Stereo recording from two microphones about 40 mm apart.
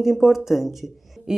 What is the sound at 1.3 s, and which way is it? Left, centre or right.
Speech, centre.